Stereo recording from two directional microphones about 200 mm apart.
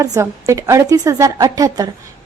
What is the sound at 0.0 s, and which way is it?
A woman's voice, 15° right (ahead or behind).